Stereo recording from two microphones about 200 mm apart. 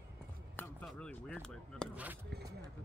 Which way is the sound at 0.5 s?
5° left (ahead or behind).